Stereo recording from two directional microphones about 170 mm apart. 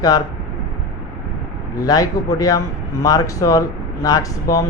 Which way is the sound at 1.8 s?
20° left (ahead or behind).